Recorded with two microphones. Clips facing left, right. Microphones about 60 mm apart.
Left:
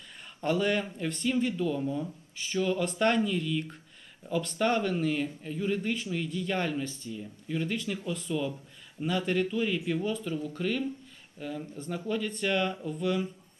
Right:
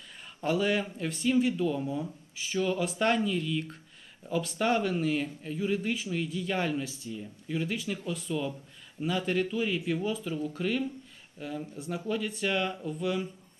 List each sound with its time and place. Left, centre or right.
0.4 s speech: centre